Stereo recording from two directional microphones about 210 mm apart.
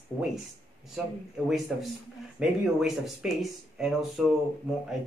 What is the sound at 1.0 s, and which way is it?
Speech, 5° right (ahead or behind).